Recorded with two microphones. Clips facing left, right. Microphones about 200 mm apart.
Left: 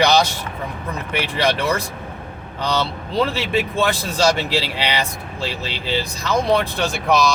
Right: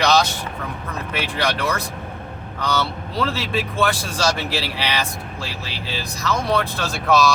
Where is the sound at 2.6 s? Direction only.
20° left (ahead or behind).